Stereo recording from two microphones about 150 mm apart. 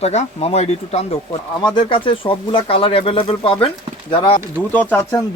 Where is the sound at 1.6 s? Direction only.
35° left (ahead or behind).